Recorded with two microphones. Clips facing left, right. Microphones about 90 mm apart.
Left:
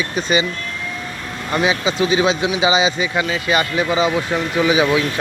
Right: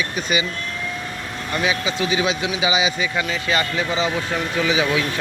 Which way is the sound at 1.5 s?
25° left (ahead or behind).